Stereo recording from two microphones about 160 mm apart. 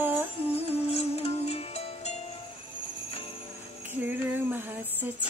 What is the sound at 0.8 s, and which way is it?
Music, 40° left (ahead or behind).